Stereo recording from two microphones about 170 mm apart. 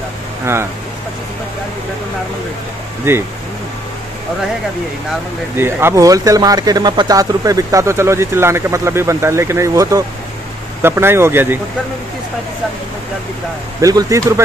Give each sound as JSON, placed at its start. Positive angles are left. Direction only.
{"t": 3.1, "sound": "speech", "side_deg": -15}
{"t": 5.6, "sound": "speech", "side_deg": -15}
{"t": 13.7, "sound": "speech", "side_deg": -20}